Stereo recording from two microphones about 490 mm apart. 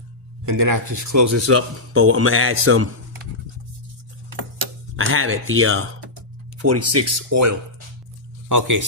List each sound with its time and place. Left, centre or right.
0.4 s speech: right
4.9 s speech: right